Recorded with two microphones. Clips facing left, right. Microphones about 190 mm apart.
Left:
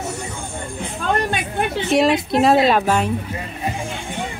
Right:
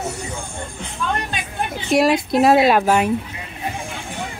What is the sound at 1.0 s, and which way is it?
Music, 45° left (ahead or behind).